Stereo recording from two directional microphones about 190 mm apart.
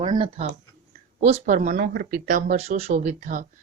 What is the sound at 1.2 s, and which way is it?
Speech, 40° right (ahead or behind).